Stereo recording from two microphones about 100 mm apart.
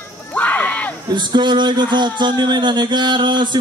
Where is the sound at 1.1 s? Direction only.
50° right (ahead or behind).